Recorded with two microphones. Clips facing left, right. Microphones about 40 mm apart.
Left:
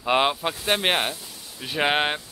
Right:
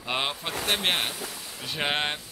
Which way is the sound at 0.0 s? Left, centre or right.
Centre.